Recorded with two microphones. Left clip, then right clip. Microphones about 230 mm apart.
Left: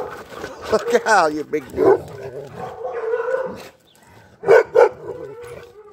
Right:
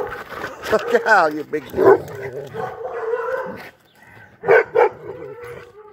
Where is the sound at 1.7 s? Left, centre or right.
Right.